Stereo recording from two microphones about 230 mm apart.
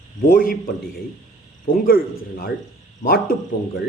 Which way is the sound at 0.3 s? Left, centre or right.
Left.